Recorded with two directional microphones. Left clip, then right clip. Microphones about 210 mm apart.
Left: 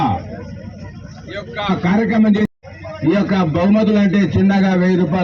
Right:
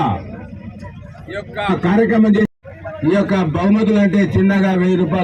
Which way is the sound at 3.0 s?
30° right (ahead or behind).